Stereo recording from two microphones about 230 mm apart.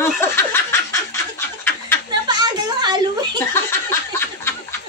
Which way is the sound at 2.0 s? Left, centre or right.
Centre.